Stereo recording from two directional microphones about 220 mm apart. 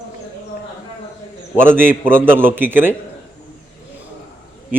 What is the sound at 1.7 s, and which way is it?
A man's voice, 10° right (ahead or behind).